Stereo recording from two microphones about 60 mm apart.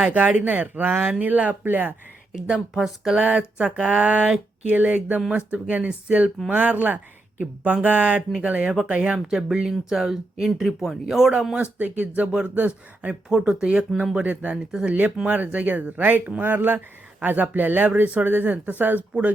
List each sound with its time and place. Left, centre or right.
0.0 s speech: right
2.3 s speech: centre
3.2 s speech: centre
11.5 s speech: right
13.3 s speech: centre; by 19.0 s right